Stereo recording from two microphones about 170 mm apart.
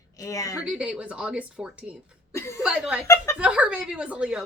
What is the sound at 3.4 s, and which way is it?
A woman's voice, 5° right (ahead or behind).